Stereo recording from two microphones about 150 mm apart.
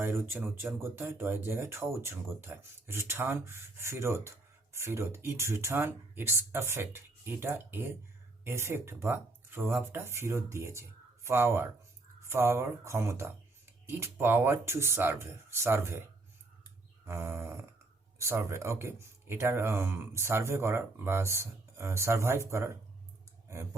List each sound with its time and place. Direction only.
0.0 s speech: 15° right (ahead or behind)
17.1 s speech: 15° right (ahead or behind)